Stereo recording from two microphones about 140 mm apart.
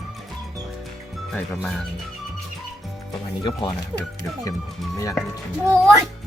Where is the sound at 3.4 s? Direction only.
35° left (ahead or behind).